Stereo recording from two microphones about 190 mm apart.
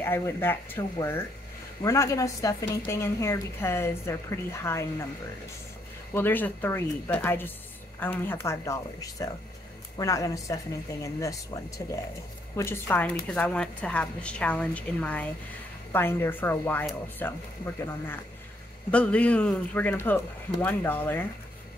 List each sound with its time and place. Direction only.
0.0 s a woman's voice: 10° left (ahead or behind)
6.1 s a woman's voice: 10° left (ahead or behind)
18.9 s a woman's voice: 5° left (ahead or behind)